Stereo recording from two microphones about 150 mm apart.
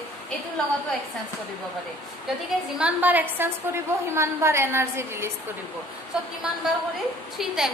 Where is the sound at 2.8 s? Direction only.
10° right (ahead or behind).